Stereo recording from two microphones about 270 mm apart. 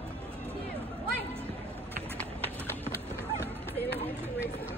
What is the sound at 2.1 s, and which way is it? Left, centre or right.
Clip-clop, centre.